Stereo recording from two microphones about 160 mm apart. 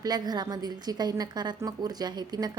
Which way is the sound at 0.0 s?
25° right (ahead or behind).